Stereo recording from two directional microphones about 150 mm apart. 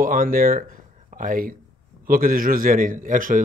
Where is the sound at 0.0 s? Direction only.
65° right (ahead or behind).